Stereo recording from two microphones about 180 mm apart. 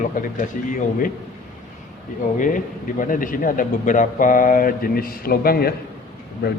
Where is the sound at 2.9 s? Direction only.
50° left (ahead or behind).